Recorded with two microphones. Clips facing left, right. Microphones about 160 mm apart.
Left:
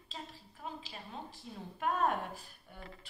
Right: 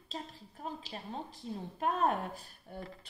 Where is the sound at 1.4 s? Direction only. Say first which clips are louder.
Right 7 dB; 40° right (ahead or behind).